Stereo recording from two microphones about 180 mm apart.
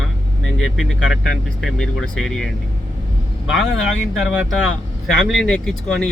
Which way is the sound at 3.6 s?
90° left.